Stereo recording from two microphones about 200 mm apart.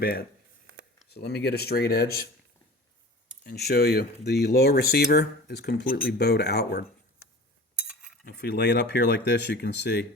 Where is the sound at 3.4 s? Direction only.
50° left (ahead or behind).